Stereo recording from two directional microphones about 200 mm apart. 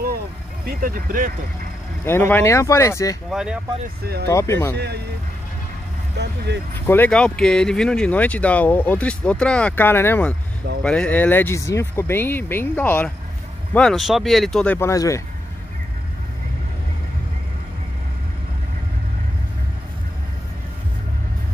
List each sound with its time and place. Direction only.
0.7 s speech: 45° right (ahead or behind)
2.0 s speech: 10° left (ahead or behind)
3.3 s speech: 5° right (ahead or behind)
4.0 s speech: 55° right (ahead or behind)
4.3 s speech: 15° left (ahead or behind)
4.7 s speech: 55° right (ahead or behind)
6.1 s speech: 55° right (ahead or behind)
6.7 s speech: 10° left (ahead or behind)